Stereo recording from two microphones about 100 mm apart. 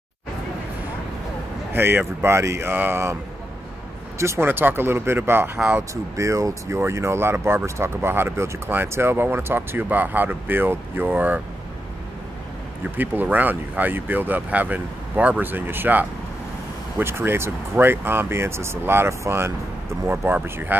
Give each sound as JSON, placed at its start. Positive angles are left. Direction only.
{"t": 1.7, "sound": "speech", "side_deg": -20}
{"t": 4.2, "sound": "speech", "side_deg": -25}
{"t": 5.6, "sound": "speech", "side_deg": -10}
{"t": 6.1, "sound": "speech", "side_deg": -30}
{"t": 12.9, "sound": "speech", "side_deg": -20}